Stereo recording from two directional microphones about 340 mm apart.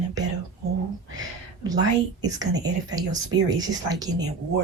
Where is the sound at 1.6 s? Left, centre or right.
Centre.